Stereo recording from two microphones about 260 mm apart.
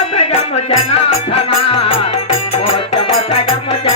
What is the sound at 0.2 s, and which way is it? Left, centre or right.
Music, left.